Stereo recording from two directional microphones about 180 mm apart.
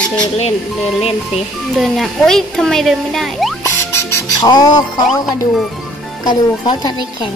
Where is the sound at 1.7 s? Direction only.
Centre (ahead or behind).